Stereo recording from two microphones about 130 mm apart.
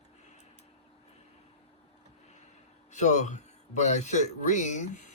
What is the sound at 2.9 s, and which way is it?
Speech, 65° left (ahead or behind).